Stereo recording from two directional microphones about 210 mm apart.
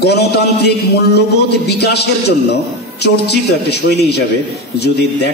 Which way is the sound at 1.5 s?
50° left (ahead or behind).